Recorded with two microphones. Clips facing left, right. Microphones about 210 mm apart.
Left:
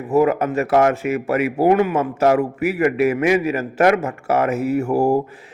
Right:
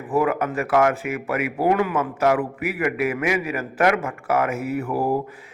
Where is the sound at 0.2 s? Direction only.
25° left (ahead or behind).